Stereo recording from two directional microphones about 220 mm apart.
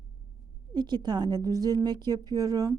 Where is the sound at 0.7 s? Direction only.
20° right (ahead or behind).